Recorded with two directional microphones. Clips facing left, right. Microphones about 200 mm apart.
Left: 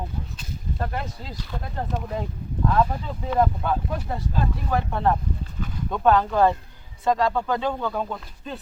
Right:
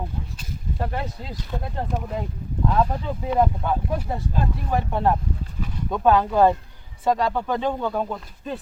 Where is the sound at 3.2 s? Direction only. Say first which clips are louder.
Even; 10° right (ahead or behind).